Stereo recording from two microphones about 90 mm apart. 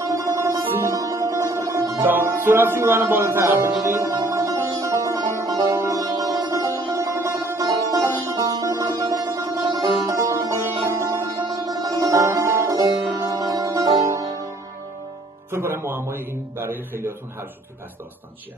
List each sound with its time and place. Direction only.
0.0 s music: 40° right (ahead or behind)
11.4 s music: 45° right (ahead or behind)
15.5 s a man's voice: 25° right (ahead or behind)